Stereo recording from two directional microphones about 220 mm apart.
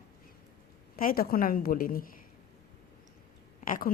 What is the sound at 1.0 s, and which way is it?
A woman's voice, 40° left (ahead or behind).